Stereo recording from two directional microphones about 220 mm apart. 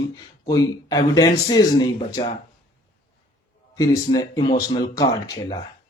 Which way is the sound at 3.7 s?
15° left (ahead or behind).